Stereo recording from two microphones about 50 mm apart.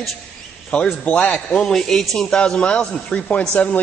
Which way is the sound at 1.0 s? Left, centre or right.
Left.